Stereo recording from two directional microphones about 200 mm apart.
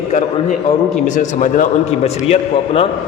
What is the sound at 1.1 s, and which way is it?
A man's voice, 40° left (ahead or behind).